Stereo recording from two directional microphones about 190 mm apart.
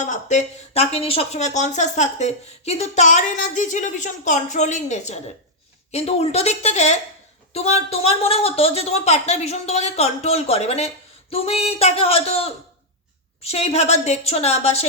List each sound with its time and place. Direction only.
0.0 s speech: 40° left (ahead or behind)